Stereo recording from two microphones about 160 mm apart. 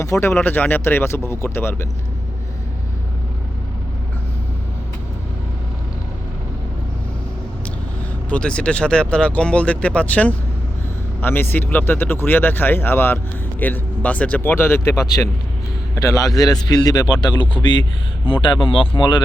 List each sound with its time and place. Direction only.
0.0 s speech: 15° left (ahead or behind)
8.3 s speech: 5° left (ahead or behind); by 19.2 s 30° left (ahead or behind)